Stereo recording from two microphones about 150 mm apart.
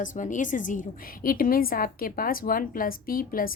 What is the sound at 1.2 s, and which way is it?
A woman's voice, 70° left (ahead or behind).